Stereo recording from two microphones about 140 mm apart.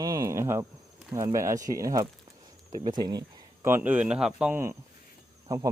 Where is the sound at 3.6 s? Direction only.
15° right (ahead or behind).